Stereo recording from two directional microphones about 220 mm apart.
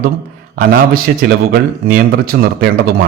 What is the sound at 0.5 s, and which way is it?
A man's voice, 40° right (ahead or behind).